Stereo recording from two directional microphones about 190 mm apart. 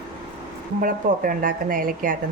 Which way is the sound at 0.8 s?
45° right (ahead or behind).